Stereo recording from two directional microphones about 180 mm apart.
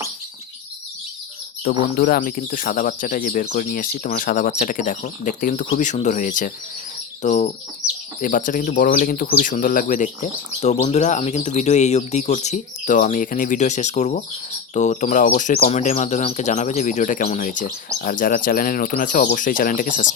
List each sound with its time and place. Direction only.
2.0 s speech: 55° left (ahead or behind)